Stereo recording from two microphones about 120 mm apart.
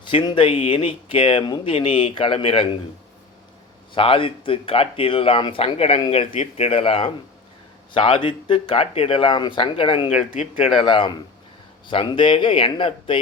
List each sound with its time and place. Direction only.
0.0 s speech: 45° left (ahead or behind)
3.9 s speech: 50° left (ahead or behind)
10.1 s speech: 60° left (ahead or behind)
10.8 s speech: 45° left (ahead or behind)